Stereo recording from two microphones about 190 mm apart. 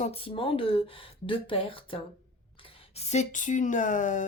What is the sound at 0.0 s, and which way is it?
Speech, 30° left (ahead or behind).